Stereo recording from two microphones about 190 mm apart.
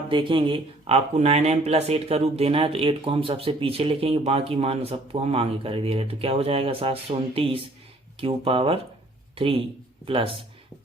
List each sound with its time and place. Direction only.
0.1 s speech: 25° right (ahead or behind)